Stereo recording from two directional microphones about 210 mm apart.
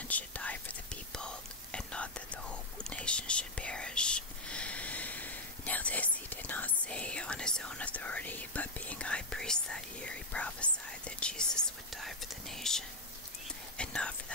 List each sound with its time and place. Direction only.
0.1 s whispering: 5° left (ahead or behind)